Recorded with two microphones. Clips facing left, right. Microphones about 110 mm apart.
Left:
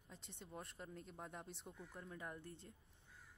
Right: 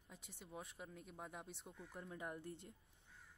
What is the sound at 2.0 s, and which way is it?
Speech, 20° right (ahead or behind).